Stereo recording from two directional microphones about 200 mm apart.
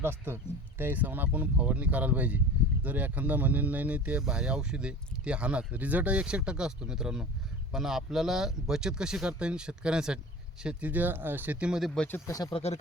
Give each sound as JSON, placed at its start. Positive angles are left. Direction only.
{"t": 0.0, "sound": "speech", "side_deg": -10}
{"t": 12.5, "sound": "speech", "side_deg": 30}